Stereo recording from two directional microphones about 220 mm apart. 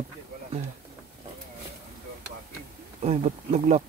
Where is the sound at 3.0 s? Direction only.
30° right (ahead or behind).